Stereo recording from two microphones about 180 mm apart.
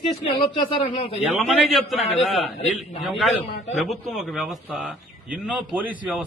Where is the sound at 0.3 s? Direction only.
30° left (ahead or behind).